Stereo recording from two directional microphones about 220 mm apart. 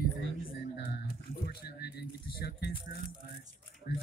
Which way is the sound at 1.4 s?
45° left (ahead or behind).